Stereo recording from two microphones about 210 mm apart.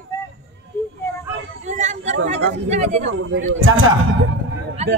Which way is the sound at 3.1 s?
65° right (ahead or behind).